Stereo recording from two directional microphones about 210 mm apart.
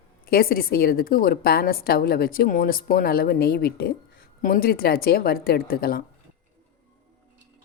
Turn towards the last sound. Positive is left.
turn(degrees=45)  # may be behind; listen again after turning